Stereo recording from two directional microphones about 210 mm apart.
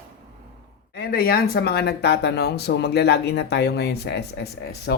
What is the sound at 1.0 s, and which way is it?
Speech, 45° left (ahead or behind).